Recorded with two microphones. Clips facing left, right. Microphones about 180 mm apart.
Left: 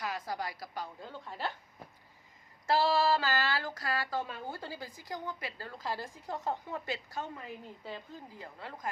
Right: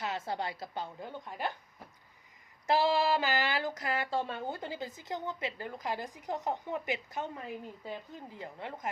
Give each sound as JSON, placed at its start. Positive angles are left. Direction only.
{"t": 0.0, "sound": "a woman's voice", "side_deg": -25}
{"t": 2.6, "sound": "speech", "side_deg": -15}